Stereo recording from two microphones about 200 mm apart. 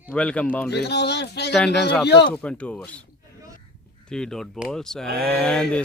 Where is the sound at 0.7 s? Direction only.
55° left (ahead or behind).